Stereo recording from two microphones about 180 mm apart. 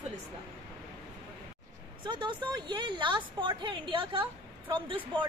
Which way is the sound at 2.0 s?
25° right (ahead or behind).